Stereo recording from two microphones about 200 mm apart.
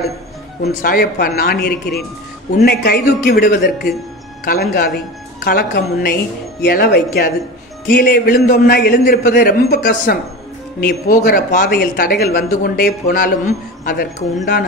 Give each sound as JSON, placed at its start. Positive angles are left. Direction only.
{"t": 0.6, "sound": "speech", "side_deg": 45}
{"t": 14.4, "sound": "speech", "side_deg": 45}